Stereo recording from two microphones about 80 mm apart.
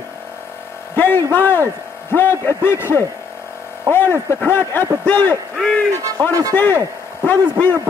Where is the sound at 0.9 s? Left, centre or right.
Left.